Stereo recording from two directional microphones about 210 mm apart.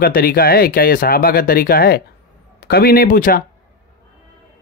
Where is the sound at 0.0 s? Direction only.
45° left (ahead or behind).